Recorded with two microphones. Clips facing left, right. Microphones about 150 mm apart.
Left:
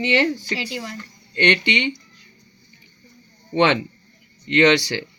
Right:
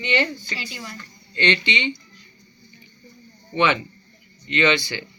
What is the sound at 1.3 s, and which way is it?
Speech, 60° left (ahead or behind).